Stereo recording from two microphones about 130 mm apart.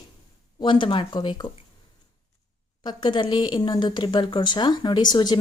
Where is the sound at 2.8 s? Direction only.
35° left (ahead or behind).